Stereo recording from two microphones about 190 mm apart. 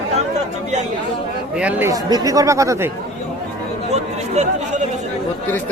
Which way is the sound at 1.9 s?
20° right (ahead or behind).